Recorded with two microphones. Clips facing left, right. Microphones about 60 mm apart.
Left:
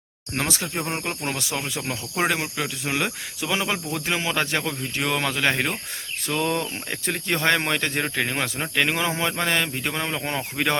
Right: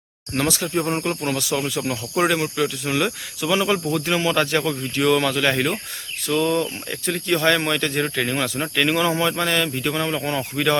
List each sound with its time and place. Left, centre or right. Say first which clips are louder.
0.3 s speech: right 4 dB; left
0.7 s speech: right 6 dB; centre
6.2 s speech: right 4 dB; left